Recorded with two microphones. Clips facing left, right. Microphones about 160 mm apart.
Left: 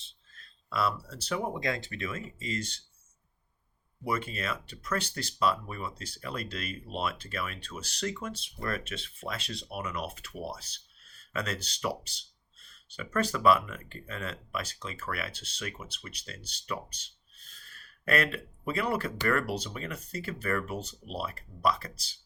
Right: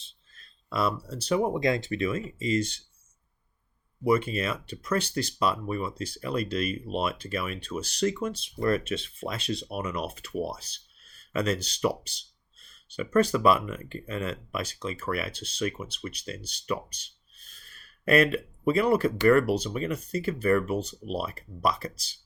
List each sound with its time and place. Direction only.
0.7 s speech: 15° right (ahead or behind)
4.0 s speech: 15° right (ahead or behind)
11.3 s speech: 20° right (ahead or behind)